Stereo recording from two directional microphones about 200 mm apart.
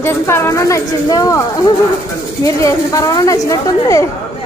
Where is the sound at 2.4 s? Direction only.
15° left (ahead or behind).